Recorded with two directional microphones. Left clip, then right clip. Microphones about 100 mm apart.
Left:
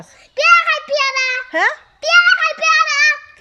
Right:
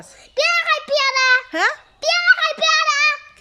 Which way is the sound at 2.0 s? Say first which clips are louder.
Left 4 dB; 35° right (ahead or behind).